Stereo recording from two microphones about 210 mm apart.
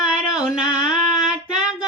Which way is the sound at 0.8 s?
5° right (ahead or behind).